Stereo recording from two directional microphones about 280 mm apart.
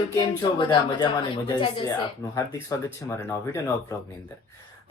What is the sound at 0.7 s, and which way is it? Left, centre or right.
Speech, centre.